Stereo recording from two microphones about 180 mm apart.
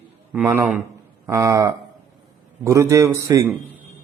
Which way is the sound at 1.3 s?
15° right (ahead or behind).